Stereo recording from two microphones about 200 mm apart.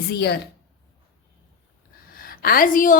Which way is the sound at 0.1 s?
55° left (ahead or behind).